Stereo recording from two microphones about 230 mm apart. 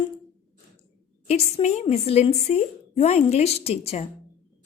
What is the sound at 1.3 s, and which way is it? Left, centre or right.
A woman's voice, left.